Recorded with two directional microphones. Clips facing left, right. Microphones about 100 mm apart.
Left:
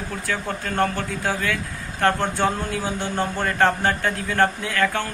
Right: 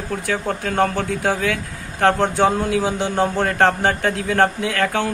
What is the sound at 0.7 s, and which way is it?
Speech, 75° right (ahead or behind).